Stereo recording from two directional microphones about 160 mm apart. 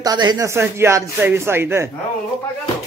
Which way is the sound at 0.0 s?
25° right (ahead or behind).